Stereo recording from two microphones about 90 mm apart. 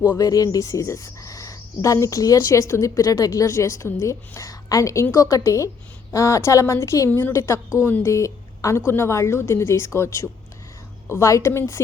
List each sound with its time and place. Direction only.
0.2 s speech: 45° left (ahead or behind)
7.1 s a woman's voice: 20° left (ahead or behind)
7.3 s a woman's voice: 35° left (ahead or behind)